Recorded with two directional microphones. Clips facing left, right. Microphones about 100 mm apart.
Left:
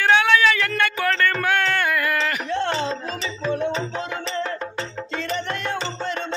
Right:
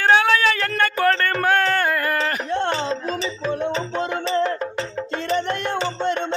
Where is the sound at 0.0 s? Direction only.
35° right (ahead or behind).